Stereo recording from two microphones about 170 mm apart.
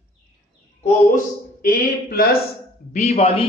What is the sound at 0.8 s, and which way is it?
Speech, 50° left (ahead or behind).